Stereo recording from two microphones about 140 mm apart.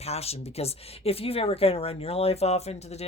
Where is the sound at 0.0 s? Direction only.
50° left (ahead or behind).